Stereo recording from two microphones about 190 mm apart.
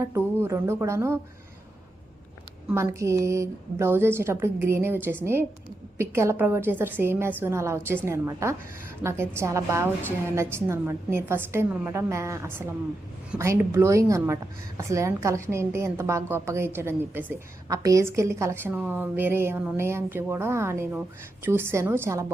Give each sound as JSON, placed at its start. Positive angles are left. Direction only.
{"t": 0.0, "sound": "a woman's voice", "side_deg": -15}
{"t": 2.6, "sound": "a woman's voice", "side_deg": -15}